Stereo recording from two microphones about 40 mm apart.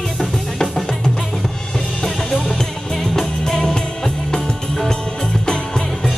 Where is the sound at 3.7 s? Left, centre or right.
Centre.